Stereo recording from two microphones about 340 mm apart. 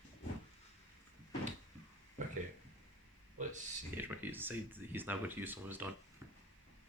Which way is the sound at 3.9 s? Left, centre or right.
Centre.